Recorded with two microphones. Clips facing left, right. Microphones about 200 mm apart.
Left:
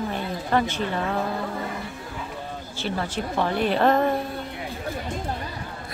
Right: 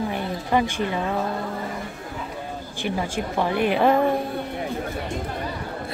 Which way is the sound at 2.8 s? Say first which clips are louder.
Right 2 dB; 10° right (ahead or behind).